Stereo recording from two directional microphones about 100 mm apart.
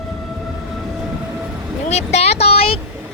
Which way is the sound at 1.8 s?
90° left.